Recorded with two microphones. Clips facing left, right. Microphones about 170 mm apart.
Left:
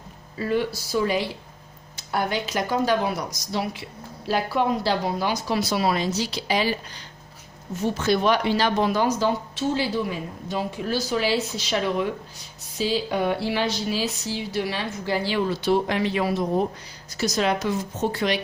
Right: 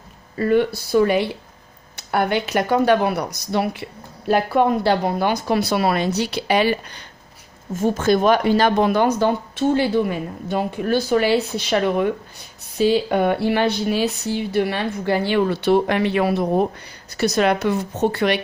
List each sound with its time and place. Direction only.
0.3 s speech: 55° right (ahead or behind)
7.7 s speech: 50° right (ahead or behind)